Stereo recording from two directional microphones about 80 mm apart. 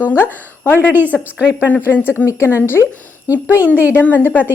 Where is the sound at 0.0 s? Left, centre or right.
Left.